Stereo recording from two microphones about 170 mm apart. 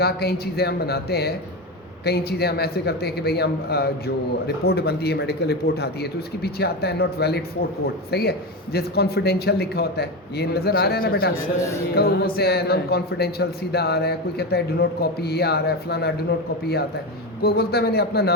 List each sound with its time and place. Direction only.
0.0 s a man's voice: 70° left (ahead or behind)
17.4 s a man's voice: 65° left (ahead or behind)